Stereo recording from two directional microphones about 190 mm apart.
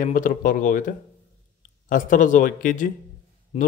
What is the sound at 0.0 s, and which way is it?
Speech, 45° left (ahead or behind).